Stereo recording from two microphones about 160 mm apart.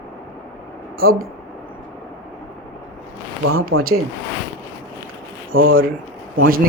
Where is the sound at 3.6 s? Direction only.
70° right (ahead or behind).